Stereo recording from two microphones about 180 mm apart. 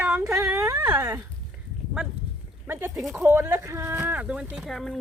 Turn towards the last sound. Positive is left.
turn(degrees=0)  # may be behind; listen again after turning